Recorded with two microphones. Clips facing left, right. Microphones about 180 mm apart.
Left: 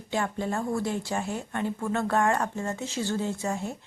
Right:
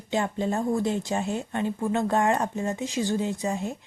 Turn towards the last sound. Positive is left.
turn(degrees=-15)  # may be behind; listen again after turning